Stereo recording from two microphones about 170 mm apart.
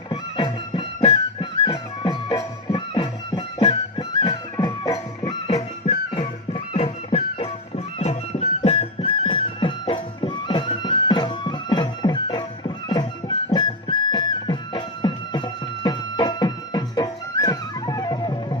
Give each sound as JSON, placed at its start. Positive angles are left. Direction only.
{"t": 0.1, "sound": "music", "side_deg": 30}
{"t": 5.5, "sound": "music", "side_deg": 40}